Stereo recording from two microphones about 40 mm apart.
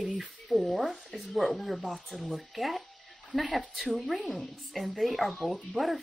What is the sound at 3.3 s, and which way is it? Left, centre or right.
Speech, centre.